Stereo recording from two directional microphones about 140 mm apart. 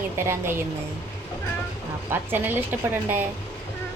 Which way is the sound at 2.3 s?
15° right (ahead or behind).